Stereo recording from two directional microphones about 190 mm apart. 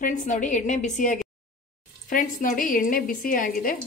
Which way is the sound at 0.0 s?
40° left (ahead or behind).